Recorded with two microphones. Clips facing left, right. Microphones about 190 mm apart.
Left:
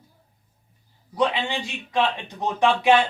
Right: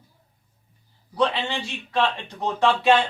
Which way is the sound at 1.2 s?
15° left (ahead or behind).